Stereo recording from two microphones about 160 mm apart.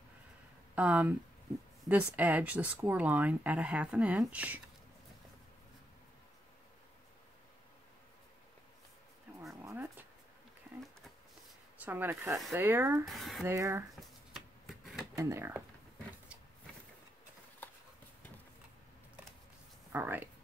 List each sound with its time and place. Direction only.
0.7 s speech: 10° right (ahead or behind)
9.7 s a sound: 10° right (ahead or behind)
11.8 s speech: 10° right (ahead or behind)
13.0 s speech: centre (ahead or behind)
13.5 s speech: 20° right (ahead or behind)
15.1 s speech: 15° right (ahead or behind)
19.9 s speech: 15° right (ahead or behind)